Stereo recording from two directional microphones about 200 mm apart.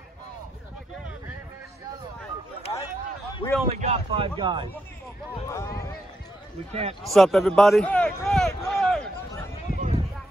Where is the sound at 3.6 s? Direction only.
30° right (ahead or behind).